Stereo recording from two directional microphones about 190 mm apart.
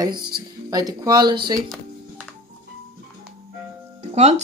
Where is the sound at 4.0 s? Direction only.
35° right (ahead or behind).